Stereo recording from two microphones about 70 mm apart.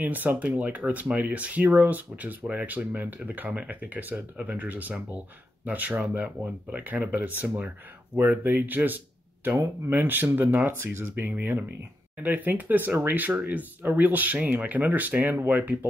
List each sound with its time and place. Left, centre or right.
0.0 s speech: right